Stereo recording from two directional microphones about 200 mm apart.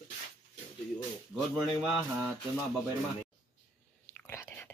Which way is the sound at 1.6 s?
Centre (ahead or behind).